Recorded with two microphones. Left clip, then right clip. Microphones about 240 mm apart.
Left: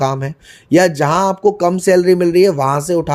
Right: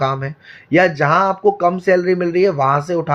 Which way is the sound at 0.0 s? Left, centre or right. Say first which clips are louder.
Left 2 dB; left.